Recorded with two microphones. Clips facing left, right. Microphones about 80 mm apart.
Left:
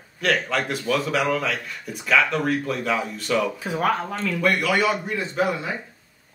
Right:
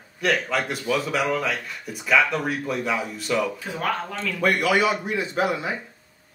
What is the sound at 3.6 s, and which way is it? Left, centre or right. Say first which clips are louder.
Speech: left 4 dB; centre.